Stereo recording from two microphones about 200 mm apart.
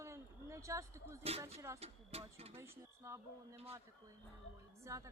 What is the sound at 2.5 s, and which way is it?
A woman's voice, 15° right (ahead or behind).